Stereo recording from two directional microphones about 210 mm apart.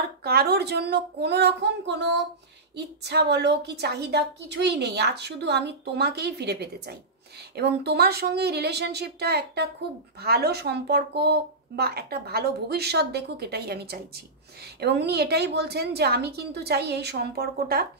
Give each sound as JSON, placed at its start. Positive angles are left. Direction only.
{"t": 0.2, "sound": "a woman's voice", "side_deg": -50}